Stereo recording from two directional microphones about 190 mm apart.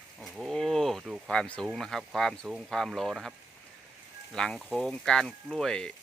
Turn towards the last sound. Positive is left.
turn(degrees=5)  # may be behind; listen again after turning